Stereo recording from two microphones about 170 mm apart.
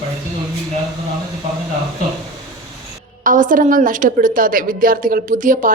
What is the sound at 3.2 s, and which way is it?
A woman's voice, 50° right (ahead or behind).